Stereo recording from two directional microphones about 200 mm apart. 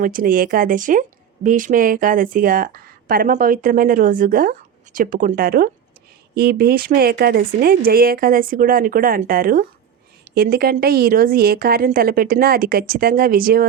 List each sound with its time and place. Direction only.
0.0 s speech: 45° right (ahead or behind)